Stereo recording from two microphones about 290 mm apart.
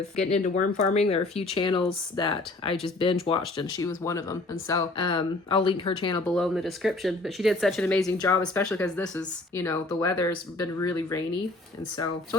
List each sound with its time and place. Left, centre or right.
0.2 s speech: left
6.3 s speech: centre